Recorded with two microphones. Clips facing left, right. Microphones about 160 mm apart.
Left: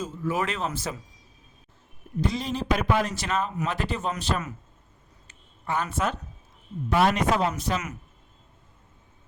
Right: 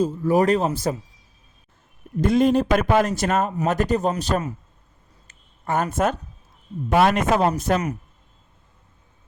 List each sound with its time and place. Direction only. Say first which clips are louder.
0.0 s speech: right 9 dB; 40° right (ahead or behind)
2.2 s speech: right 10 dB; 55° right (ahead or behind); by 4.5 s 35° right (ahead or behind)
5.3 s a sound: right 5 dB; 45° right (ahead or behind)
6.9 s speech: right 4 dB; 50° right (ahead or behind)